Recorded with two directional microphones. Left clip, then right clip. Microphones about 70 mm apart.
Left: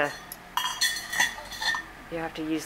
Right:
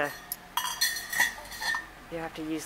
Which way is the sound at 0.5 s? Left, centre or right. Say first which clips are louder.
Left 3 dB; centre.